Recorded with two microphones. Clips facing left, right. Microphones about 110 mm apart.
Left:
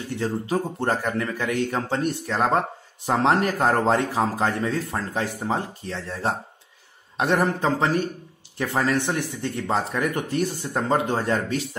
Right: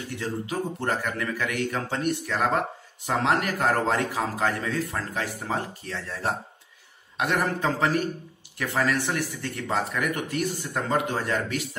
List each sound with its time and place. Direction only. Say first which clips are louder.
0.1 s a man's voice: left 6 dB; 30° left (ahead or behind)